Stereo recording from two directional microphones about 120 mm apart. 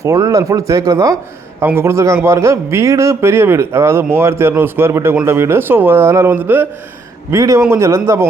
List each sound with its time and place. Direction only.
0.0 s a man's voice: 25° right (ahead or behind)